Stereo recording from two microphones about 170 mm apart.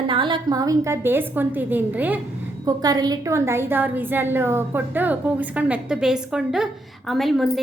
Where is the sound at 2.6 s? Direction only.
20° right (ahead or behind).